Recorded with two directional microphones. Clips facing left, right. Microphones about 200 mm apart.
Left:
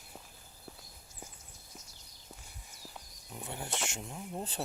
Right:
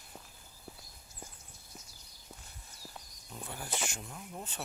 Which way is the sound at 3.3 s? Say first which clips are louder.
Left 2 dB; 20° left (ahead or behind).